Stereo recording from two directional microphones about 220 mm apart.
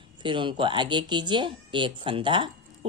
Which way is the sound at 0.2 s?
20° right (ahead or behind).